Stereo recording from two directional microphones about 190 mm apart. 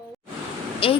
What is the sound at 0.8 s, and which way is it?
Speech, 30° left (ahead or behind).